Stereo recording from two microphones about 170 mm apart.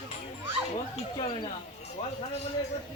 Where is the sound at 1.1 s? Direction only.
25° left (ahead or behind).